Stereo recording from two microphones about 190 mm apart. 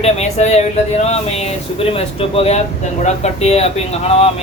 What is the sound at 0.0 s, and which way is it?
Speech, 35° left (ahead or behind).